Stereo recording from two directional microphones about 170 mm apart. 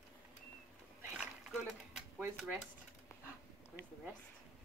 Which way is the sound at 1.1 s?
10° right (ahead or behind).